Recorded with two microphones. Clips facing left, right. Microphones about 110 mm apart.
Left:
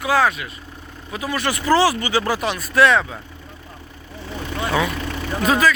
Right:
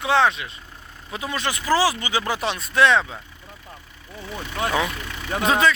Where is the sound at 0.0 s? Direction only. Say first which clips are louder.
Left 1 dB; 25° right (ahead or behind).